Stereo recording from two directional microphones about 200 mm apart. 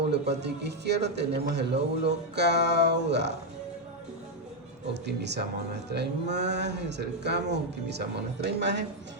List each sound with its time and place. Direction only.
0.1 s speech: 55° right (ahead or behind)
5.0 s speech: 60° right (ahead or behind)